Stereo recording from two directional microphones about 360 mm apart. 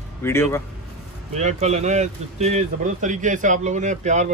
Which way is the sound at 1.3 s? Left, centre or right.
Centre.